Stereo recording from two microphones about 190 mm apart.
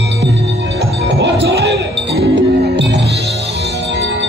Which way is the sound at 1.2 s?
65° right (ahead or behind).